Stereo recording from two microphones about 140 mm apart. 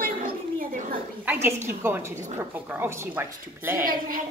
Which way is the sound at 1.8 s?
15° right (ahead or behind).